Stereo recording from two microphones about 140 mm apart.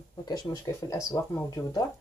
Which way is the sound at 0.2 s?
25° left (ahead or behind).